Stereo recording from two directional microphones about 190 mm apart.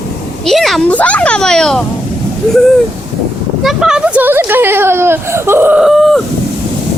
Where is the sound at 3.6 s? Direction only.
5° right (ahead or behind).